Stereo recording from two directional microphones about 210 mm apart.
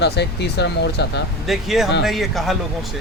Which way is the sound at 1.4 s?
Centre (ahead or behind).